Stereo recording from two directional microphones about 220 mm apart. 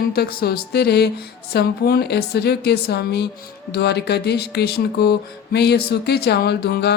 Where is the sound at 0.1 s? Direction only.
45° left (ahead or behind).